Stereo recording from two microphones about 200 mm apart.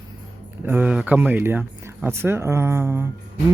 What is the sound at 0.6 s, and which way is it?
Speech, 10° right (ahead or behind).